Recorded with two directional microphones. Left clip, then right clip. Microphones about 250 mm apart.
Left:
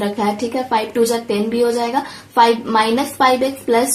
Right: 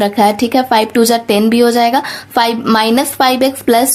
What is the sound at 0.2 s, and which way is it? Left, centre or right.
A woman's voice, right.